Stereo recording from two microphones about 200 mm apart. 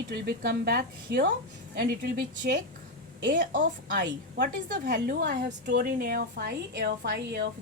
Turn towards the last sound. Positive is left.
turn(degrees=-55)  # may be behind; listen again after turning